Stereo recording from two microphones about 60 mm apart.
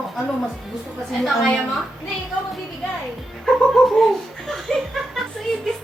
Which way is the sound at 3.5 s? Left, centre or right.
Centre.